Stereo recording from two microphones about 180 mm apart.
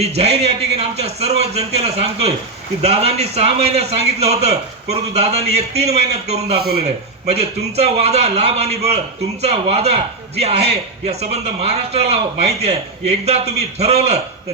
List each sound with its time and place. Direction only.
0.0 s a man's voice: 35° right (ahead or behind)
6.6 s a man's voice: 60° right (ahead or behind)
7.8 s a man's voice: 35° right (ahead or behind)